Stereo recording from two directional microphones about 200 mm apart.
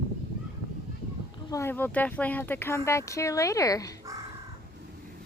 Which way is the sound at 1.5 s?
10° left (ahead or behind).